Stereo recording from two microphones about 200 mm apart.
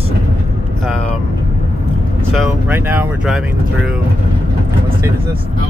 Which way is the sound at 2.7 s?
10° right (ahead or behind).